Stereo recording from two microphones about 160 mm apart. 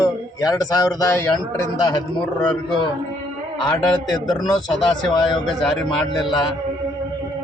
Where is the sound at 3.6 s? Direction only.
25° left (ahead or behind).